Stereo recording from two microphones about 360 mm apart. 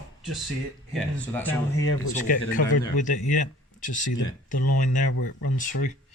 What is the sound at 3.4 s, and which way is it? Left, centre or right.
Speech, left.